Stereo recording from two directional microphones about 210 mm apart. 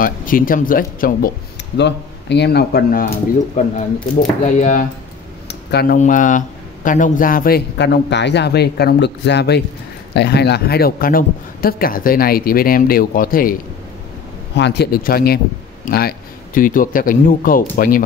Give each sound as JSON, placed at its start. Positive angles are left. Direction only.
{"t": 0.0, "sound": "speech", "side_deg": 40}
{"t": 1.8, "sound": "speech", "side_deg": 55}
{"t": 3.6, "sound": "speech", "side_deg": 35}
{"t": 5.5, "sound": "a sound", "side_deg": 50}
{"t": 5.9, "sound": "speech", "side_deg": 35}
{"t": 14.6, "sound": "speech", "side_deg": 55}